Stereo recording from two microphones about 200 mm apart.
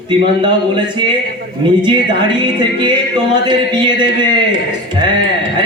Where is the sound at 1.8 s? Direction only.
20° right (ahead or behind).